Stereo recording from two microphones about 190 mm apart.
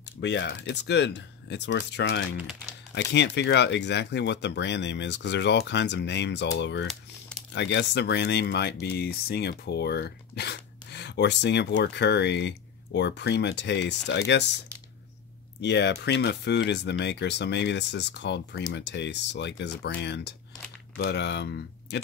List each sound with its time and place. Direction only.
0.2 s speech: 65° left (ahead or behind)
6.9 s a sound: centre (ahead or behind)
7.5 s speech: 65° left (ahead or behind)
15.6 s speech: 65° left (ahead or behind)